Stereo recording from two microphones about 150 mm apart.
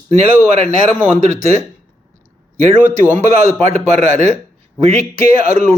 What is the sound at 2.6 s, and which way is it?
Speech, 50° right (ahead or behind).